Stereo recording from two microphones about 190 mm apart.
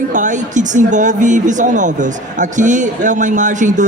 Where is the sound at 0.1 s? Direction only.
40° right (ahead or behind).